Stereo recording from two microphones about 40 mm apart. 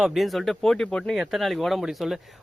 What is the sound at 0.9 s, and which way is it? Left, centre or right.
Speech, left.